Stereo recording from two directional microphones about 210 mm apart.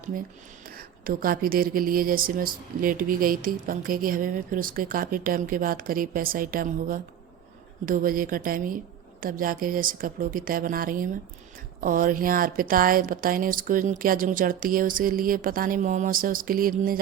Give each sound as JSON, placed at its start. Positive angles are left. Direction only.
{"t": 0.7, "sound": "speech", "side_deg": -45}